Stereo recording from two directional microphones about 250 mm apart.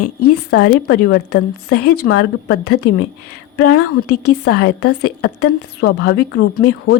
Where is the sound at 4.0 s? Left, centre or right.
Left.